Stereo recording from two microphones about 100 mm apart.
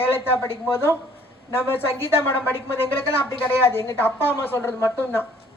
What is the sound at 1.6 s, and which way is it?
Speech, 20° left (ahead or behind).